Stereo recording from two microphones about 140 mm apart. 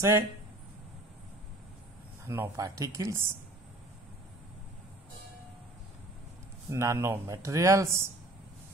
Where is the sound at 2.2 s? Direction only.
20° right (ahead or behind).